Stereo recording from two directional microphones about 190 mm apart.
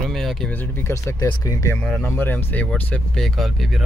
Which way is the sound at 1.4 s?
15° left (ahead or behind).